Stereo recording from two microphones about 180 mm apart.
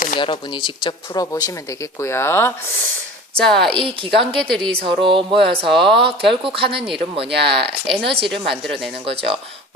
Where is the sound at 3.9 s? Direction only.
30° right (ahead or behind).